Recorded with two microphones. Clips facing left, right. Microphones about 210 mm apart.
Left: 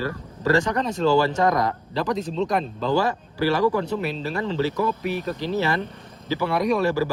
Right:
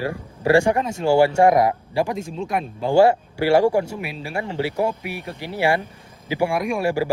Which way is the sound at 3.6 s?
45° right (ahead or behind).